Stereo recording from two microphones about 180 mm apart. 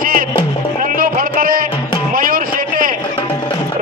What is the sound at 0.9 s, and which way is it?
Music, 50° right (ahead or behind).